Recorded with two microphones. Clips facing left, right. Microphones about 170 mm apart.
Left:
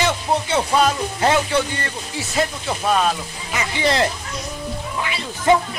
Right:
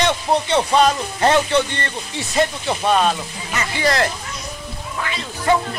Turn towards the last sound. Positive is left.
turn(degrees=15)  # may be behind; listen again after turning